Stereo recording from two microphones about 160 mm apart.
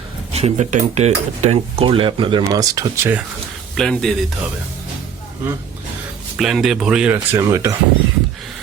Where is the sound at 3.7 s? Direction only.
Centre (ahead or behind).